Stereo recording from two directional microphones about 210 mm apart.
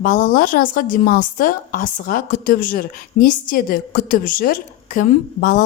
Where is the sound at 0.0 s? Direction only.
40° left (ahead or behind).